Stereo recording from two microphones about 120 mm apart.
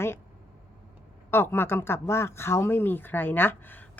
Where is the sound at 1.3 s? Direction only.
20° left (ahead or behind).